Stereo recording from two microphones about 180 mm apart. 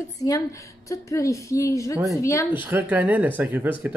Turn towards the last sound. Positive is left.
turn(degrees=-10)  # may be behind; listen again after turning